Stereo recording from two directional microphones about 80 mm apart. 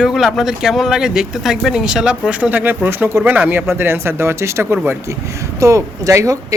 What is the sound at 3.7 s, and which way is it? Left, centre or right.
Speech, right.